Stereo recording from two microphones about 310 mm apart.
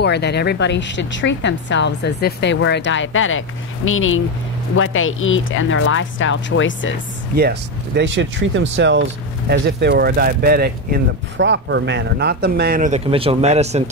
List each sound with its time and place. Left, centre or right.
0.0 s a woman's voice: left
7.3 s speech: right